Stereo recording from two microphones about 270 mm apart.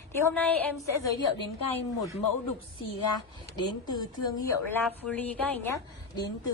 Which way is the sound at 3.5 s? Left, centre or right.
Centre.